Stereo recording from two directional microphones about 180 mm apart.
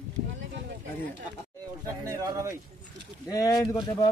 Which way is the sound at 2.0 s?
20° right (ahead or behind).